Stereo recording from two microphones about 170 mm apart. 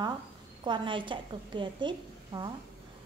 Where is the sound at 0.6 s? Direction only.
30° right (ahead or behind).